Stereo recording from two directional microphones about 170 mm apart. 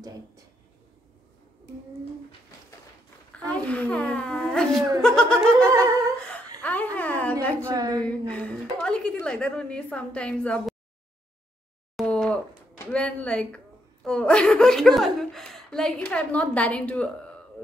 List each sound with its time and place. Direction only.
3.3 s a woman's voice: 10° left (ahead or behind)
7.6 s a woman's voice: 20° right (ahead or behind)
8.0 s a woman's voice: 5° left (ahead or behind)
12.0 s a sound: 5° left (ahead or behind)
14.0 s a woman's voice: 5° left (ahead or behind)